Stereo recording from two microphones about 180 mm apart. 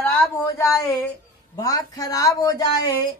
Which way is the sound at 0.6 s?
15° left (ahead or behind).